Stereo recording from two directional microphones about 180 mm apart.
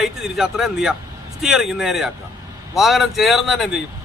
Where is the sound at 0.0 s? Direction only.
Centre (ahead or behind).